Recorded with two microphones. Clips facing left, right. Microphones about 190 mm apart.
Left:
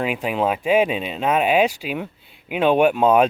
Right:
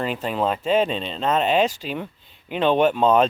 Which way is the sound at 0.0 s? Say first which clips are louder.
Left 2 dB; 10° left (ahead or behind).